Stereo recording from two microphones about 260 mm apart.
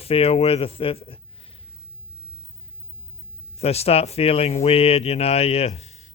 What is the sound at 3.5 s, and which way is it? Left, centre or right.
A man's voice, left.